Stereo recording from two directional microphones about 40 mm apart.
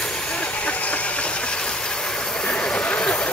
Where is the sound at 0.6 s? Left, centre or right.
Left.